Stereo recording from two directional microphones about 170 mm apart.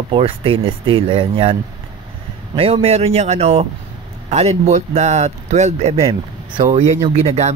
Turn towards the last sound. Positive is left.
turn(degrees=-40)  # may be behind; listen again after turning